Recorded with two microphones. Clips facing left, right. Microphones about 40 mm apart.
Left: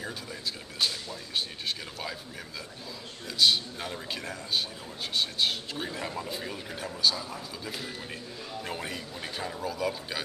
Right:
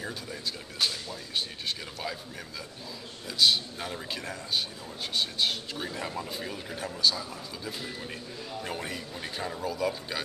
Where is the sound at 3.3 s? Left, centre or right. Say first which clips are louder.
Even; centre.